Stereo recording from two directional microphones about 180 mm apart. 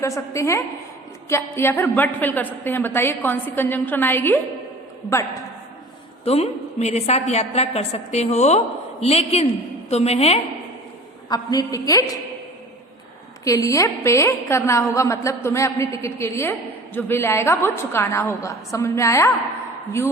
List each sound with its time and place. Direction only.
0.0 s a woman's voice: 15° left (ahead or behind)
6.2 s a woman's voice: 35° left (ahead or behind)
11.3 s a woman's voice: 20° left (ahead or behind)
13.4 s a woman's voice: 20° left (ahead or behind)